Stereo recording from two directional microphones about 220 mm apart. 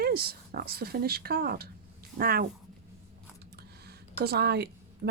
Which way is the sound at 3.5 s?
45° right (ahead or behind).